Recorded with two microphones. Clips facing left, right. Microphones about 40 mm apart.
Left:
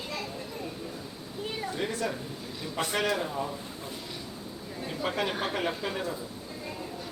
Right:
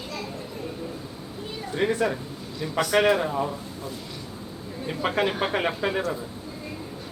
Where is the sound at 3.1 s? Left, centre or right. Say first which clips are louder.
Right 6 dB; right.